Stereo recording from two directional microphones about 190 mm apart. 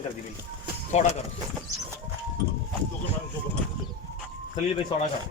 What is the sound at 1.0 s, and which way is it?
Speech, 35° left (ahead or behind).